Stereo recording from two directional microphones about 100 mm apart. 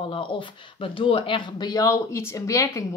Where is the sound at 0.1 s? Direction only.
60° left (ahead or behind).